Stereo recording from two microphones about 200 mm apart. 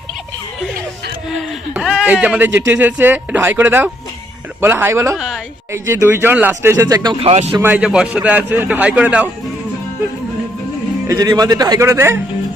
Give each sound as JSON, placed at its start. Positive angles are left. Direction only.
{"t": 1.3, "sound": "speech", "side_deg": 0}
{"t": 5.1, "sound": "a woman's voice", "side_deg": 0}
{"t": 5.7, "sound": "speech", "side_deg": -15}
{"t": 7.6, "sound": "speech", "side_deg": -5}
{"t": 11.1, "sound": "speech", "side_deg": -20}